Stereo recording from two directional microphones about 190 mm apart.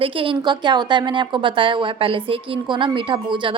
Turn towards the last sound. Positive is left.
turn(degrees=-25)  # may be behind; listen again after turning